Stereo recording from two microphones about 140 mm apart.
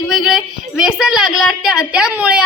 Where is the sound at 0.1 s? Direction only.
Centre (ahead or behind).